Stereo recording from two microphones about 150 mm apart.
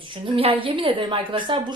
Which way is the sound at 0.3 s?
35° right (ahead or behind).